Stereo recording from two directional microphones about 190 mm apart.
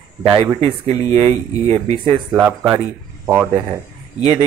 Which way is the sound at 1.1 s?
30° right (ahead or behind).